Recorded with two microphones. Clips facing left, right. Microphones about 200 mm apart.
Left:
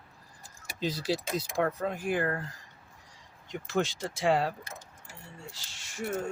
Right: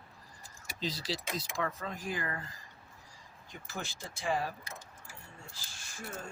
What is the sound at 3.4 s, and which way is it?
Speech, 80° left.